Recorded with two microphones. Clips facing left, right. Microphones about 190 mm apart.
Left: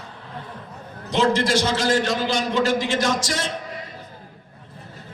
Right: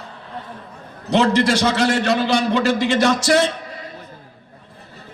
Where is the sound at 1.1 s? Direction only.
65° right (ahead or behind).